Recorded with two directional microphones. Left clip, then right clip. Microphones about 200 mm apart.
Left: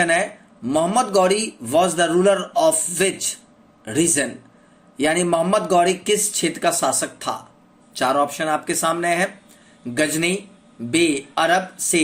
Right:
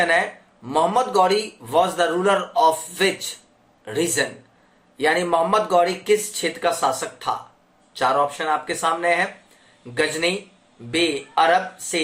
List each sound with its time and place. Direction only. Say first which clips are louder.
0.0 s speech: even; 40° left (ahead or behind)